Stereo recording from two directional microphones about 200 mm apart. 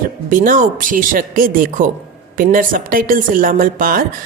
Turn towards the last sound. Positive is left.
turn(degrees=-45)  # may be behind; listen again after turning